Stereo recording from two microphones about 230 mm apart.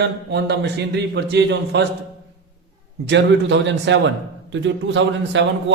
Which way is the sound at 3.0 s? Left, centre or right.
Right.